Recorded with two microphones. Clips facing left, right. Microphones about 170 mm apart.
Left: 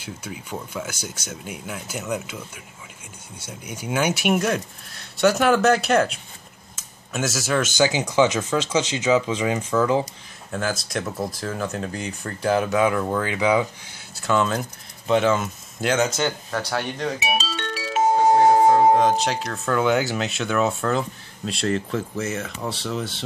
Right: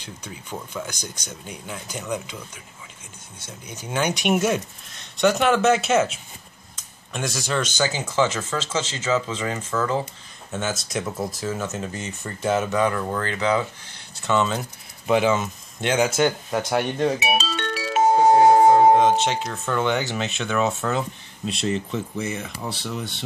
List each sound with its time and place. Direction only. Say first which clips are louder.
0.0 s speech: left 4 dB; 10° left (ahead or behind)
10.5 s speech: left 1 dB; 5° right (ahead or behind)
14.1 s speech: left 1 dB; centre (ahead or behind)
16.0 s speech: right 2 dB; 15° right (ahead or behind)
17.2 s music: right 2 dB; 60° right (ahead or behind)
18.9 s speech: right 1 dB; centre (ahead or behind)